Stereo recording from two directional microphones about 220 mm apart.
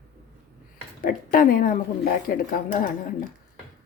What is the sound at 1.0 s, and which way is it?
Speech, 40° left (ahead or behind).